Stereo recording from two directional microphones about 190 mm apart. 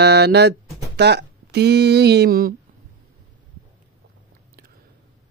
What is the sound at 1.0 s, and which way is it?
Speech, 60° right (ahead or behind).